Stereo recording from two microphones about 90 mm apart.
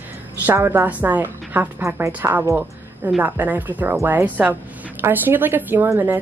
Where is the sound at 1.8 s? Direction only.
30° right (ahead or behind).